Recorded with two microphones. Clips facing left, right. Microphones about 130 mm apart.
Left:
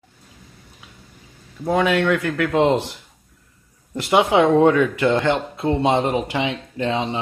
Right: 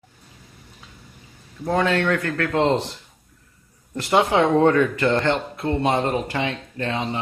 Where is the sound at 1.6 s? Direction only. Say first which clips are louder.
Left 2 dB; 10° left (ahead or behind).